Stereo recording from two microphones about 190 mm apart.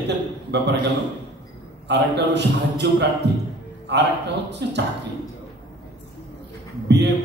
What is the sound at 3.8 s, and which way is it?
Speech, 65° right (ahead or behind).